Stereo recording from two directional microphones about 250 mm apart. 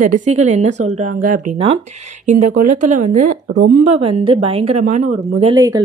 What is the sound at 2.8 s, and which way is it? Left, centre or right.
Speech, right.